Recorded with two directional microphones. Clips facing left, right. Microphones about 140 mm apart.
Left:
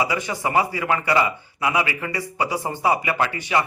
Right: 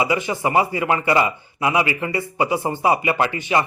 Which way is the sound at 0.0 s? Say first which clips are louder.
Right 3 dB; 20° right (ahead or behind).